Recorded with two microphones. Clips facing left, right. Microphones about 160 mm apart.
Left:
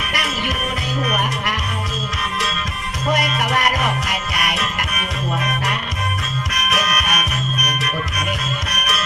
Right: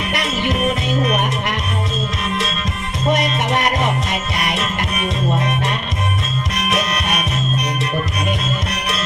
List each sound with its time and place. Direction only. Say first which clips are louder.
0.1 s music: right 4 dB; 25° right (ahead or behind)
3.1 s music: right 2 dB; 25° right (ahead or behind)